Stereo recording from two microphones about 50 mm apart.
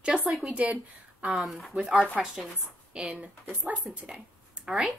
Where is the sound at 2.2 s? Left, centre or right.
Centre.